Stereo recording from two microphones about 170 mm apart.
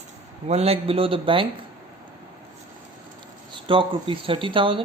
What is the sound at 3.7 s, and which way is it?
Speech, 30° right (ahead or behind).